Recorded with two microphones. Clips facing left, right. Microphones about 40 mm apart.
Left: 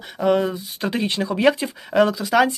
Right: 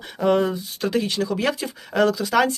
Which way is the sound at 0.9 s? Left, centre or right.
Left.